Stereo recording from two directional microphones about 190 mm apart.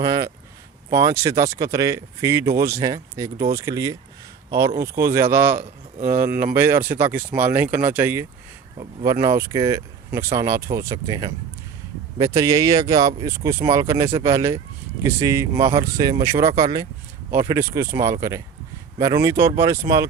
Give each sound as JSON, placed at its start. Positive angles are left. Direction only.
{"t": 0.0, "sound": "speech", "side_deg": -20}